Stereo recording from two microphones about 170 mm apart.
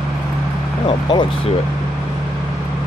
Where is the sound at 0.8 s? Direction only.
30° left (ahead or behind).